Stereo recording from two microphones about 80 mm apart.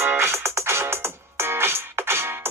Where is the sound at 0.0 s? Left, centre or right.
Right.